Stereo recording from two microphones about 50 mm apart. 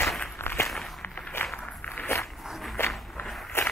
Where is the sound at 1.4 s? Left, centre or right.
Left.